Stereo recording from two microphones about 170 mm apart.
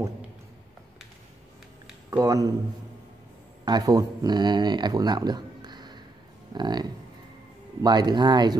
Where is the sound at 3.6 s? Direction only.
25° right (ahead or behind).